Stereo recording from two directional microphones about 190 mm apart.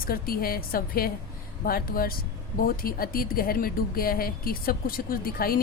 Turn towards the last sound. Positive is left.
turn(degrees=50)  # may be behind; listen again after turning